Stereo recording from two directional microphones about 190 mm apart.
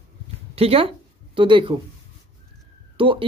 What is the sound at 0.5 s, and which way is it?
Speech, 30° right (ahead or behind).